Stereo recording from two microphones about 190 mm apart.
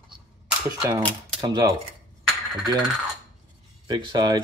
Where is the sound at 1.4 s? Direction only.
20° right (ahead or behind).